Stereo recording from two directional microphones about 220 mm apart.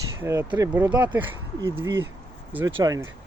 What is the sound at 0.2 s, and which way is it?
Speech, 10° right (ahead or behind).